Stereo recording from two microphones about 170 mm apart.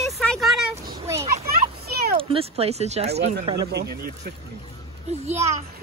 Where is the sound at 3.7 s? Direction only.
75° right (ahead or behind).